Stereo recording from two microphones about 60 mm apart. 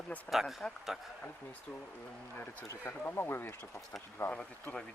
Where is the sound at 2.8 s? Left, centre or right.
Left.